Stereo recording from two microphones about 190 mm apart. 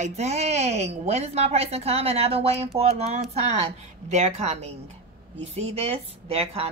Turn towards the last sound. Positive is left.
turn(degrees=-30)  # may be behind; listen again after turning